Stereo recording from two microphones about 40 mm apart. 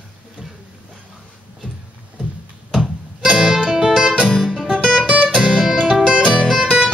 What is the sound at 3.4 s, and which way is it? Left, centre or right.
Music, centre.